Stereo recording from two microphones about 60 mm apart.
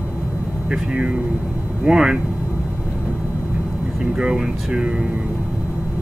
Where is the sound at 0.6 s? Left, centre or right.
Centre.